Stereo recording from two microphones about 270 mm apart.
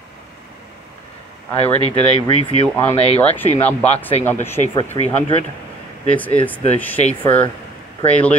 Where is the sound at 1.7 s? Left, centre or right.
Left.